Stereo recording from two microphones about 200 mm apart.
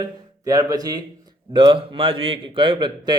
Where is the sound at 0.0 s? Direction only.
20° right (ahead or behind).